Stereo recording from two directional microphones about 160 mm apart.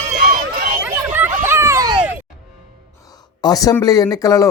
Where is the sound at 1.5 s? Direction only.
15° right (ahead or behind).